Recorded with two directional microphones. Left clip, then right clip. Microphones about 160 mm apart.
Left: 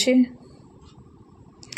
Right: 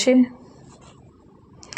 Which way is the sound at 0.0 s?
10° left (ahead or behind).